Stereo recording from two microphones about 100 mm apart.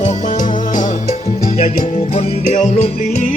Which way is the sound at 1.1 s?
90° left.